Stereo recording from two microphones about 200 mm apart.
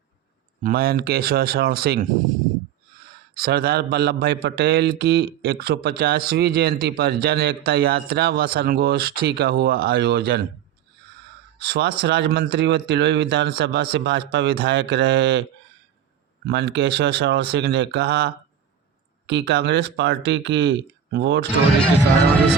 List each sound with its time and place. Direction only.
0.6 s a man's voice: 50° right (ahead or behind)
3.3 s a man's voice: 50° right (ahead or behind)
11.6 s speech: 55° right (ahead or behind)
16.5 s speech: 55° right (ahead or behind)